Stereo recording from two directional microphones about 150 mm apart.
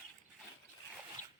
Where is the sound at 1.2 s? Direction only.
55° left (ahead or behind).